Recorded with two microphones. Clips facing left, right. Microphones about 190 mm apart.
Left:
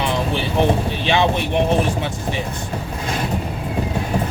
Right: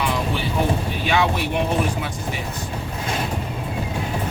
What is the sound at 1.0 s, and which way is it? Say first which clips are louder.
Speech: left 2 dB; 25° left (ahead or behind).